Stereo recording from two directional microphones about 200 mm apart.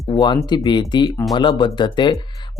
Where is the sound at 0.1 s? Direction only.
20° left (ahead or behind).